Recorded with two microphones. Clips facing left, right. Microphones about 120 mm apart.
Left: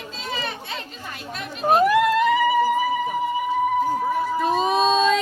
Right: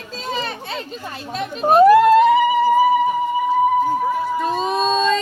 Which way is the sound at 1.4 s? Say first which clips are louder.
Right 6 dB; 35° right (ahead or behind).